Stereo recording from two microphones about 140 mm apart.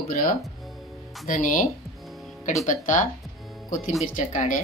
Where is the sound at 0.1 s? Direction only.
80° left.